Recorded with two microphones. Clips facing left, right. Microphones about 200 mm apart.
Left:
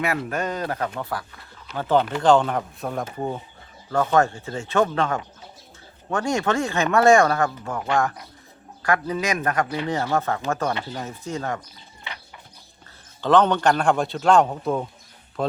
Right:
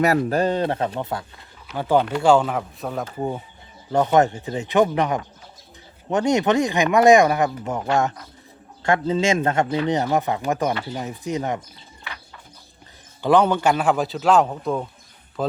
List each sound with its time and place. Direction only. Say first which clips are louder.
0.0 s speech: right 7 dB; 40° right (ahead or behind); by 1.5 s 25° right (ahead or behind)
1.6 s a man's voice: right 1 dB; 10° right (ahead or behind)
3.8 s speech: right 3 dB; 20° right (ahead or behind)
13.2 s a man's voice: right 1 dB; 10° right (ahead or behind)